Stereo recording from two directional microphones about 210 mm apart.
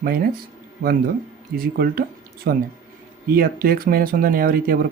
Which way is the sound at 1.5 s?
45° right (ahead or behind).